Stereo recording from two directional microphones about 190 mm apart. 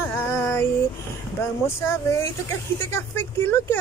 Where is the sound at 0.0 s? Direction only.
10° left (ahead or behind).